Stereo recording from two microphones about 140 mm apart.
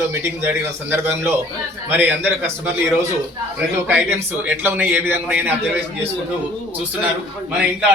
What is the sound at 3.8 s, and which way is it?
Speech, 10° right (ahead or behind).